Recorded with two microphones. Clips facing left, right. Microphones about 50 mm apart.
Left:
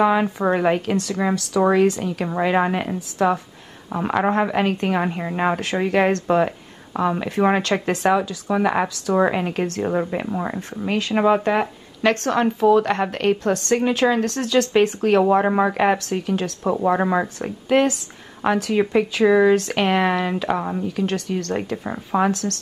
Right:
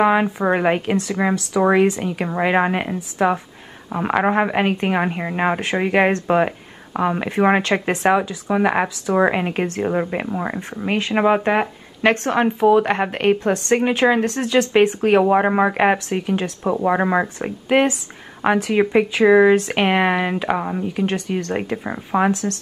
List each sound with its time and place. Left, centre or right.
0.0 s a woman's voice: right